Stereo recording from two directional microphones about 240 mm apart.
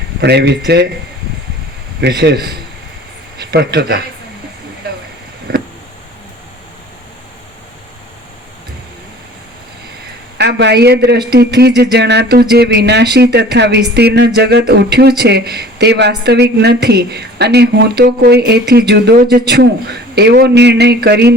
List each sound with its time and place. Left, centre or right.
0.2 s a woman's voice: right
2.0 s a woman's voice: right
4.8 s a sound: right
10.3 s a woman's voice: right